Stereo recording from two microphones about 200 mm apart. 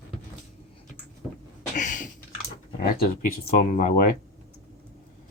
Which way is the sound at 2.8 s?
50° left (ahead or behind).